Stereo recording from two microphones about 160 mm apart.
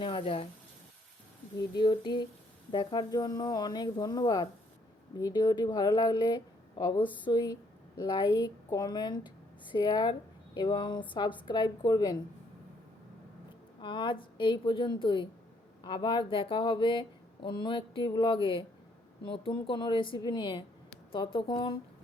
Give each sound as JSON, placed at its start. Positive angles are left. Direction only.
{"t": 0.0, "sound": "speech", "side_deg": 35}
{"t": 1.7, "sound": "a woman's voice", "side_deg": 30}
{"t": 13.8, "sound": "a woman's voice", "side_deg": 30}